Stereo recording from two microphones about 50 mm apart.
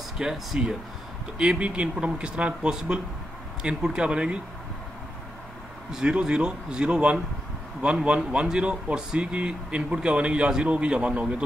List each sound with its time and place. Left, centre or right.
0.2 s a man's voice: centre
1.4 s speech: centre
5.9 s a man's voice: centre